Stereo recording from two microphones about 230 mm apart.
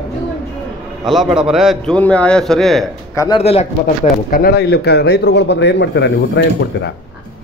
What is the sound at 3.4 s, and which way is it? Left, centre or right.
Speech, left.